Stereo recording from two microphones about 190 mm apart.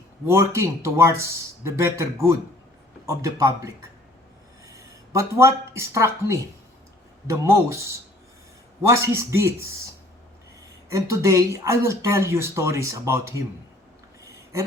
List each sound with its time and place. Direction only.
0.3 s speech: 15° right (ahead or behind)
8.9 s speech: 15° right (ahead or behind)
10.8 s speech: 15° right (ahead or behind)